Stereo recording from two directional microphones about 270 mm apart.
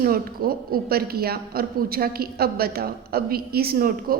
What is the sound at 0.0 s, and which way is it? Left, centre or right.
A woman's voice, right.